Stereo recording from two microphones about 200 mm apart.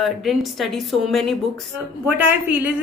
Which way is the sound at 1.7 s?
10° right (ahead or behind).